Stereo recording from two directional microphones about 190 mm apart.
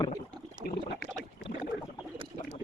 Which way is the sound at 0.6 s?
40° right (ahead or behind).